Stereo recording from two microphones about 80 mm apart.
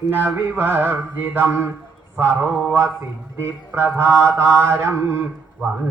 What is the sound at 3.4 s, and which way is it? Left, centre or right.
Music, right.